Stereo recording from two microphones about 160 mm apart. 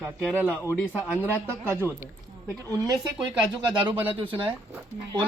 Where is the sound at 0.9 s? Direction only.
10° right (ahead or behind).